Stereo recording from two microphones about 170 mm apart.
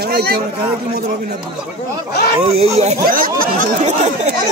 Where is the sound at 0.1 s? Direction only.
70° right (ahead or behind).